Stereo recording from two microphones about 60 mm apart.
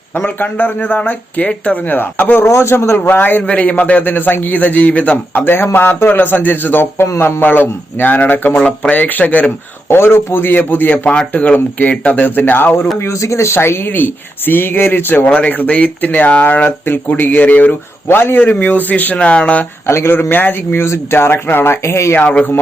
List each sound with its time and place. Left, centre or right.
0.3 s speech: left
2.5 s speech: left
3.0 s speech: left
7.4 s speech: left
8.5 s speech: centre
9.9 s speech: left
13.0 s speech: left
19.9 s speech: left
20.8 s speech: left